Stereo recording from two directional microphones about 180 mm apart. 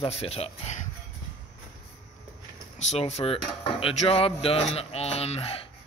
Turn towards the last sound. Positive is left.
turn(degrees=30)  # may be behind; listen again after turning